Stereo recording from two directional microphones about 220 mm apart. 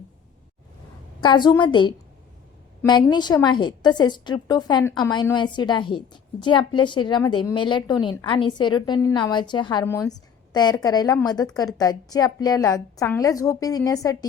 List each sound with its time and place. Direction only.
1.2 s a woman's voice: 20° left (ahead or behind)